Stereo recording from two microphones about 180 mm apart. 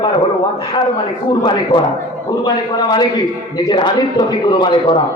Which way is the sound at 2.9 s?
25° left (ahead or behind).